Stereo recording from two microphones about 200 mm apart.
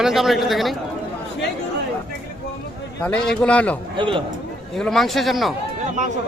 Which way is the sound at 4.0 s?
25° right (ahead or behind).